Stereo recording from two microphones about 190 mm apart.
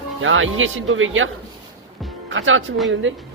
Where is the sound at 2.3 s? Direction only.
90° right.